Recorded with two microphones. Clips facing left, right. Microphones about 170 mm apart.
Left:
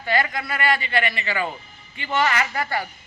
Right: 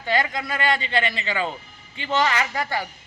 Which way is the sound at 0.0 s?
20° right (ahead or behind).